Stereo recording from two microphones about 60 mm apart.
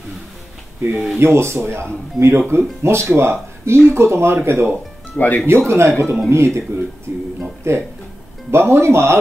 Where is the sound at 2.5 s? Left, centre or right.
Right.